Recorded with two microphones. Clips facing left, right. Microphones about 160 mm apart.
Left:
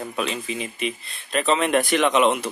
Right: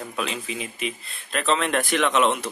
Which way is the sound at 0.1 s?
Centre (ahead or behind).